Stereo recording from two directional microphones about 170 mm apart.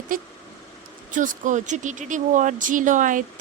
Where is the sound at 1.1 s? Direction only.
50° right (ahead or behind).